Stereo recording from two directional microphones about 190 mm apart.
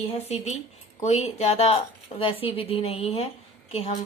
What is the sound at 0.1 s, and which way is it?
A woman's voice, 35° left (ahead or behind).